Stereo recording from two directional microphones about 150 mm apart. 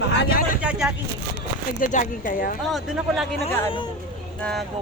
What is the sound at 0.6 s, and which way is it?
Vehicle, 5° right (ahead or behind).